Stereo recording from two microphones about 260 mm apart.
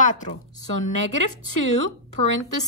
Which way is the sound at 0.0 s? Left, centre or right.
Left.